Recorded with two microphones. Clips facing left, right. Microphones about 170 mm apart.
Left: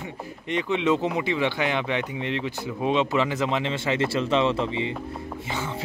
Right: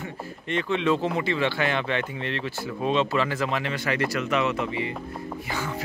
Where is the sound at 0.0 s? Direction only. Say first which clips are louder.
Even; 15° left (ahead or behind).